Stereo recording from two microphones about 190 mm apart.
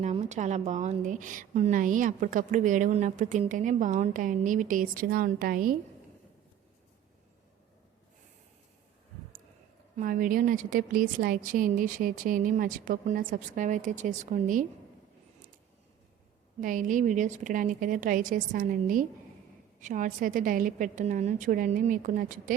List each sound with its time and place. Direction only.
0.0 s a woman's voice: 35° right (ahead or behind)
10.0 s a woman's voice: 45° right (ahead or behind)
16.6 s a woman's voice: 45° right (ahead or behind)